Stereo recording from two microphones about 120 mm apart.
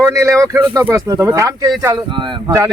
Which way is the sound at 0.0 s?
25° right (ahead or behind).